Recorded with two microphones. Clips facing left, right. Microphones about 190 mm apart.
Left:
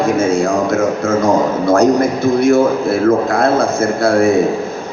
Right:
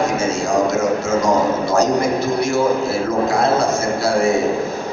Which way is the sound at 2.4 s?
55° left (ahead or behind).